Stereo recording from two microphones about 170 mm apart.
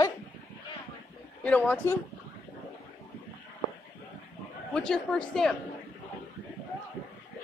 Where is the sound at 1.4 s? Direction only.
10° left (ahead or behind).